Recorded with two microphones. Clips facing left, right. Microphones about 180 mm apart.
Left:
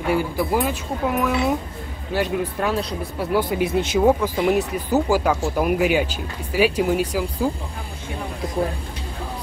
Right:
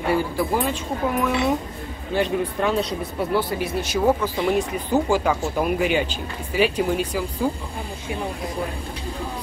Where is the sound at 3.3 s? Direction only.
20° left (ahead or behind).